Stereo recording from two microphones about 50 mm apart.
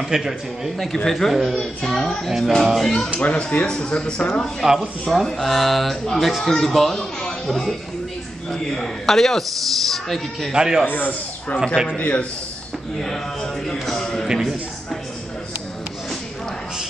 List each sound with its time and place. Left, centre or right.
0.1 s a man's voice: centre
3.2 s speech: left
3.6 s a man's voice: centre
10.5 s a man's voice: centre
10.9 s a man's voice: left
11.6 s speech: centre
12.0 s speech: left
13.0 s speech: centre
14.2 s a man's voice: centre